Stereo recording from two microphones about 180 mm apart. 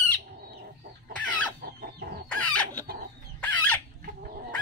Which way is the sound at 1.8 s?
60° right (ahead or behind).